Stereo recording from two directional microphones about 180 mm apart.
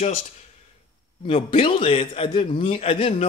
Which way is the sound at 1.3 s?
30° left (ahead or behind).